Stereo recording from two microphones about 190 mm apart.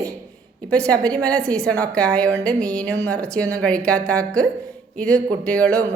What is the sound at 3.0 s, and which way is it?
A woman's voice, 5° left (ahead or behind).